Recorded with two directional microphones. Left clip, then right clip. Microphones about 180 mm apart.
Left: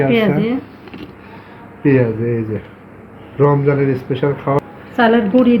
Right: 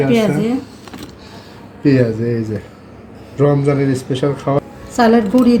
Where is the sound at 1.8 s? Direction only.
5° right (ahead or behind).